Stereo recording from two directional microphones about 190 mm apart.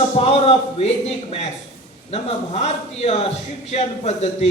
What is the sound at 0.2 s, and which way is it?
A man's voice, 30° left (ahead or behind).